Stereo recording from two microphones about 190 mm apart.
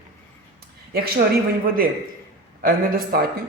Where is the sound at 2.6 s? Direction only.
50° right (ahead or behind).